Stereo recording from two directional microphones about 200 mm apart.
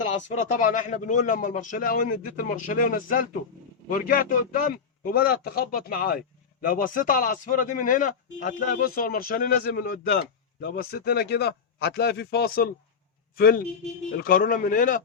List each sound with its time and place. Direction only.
0.0 s a man's voice: 40° left (ahead or behind)